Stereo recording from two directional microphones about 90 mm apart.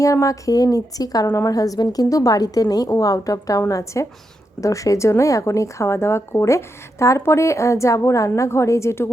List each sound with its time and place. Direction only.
0.0 s a woman's voice: 35° left (ahead or behind)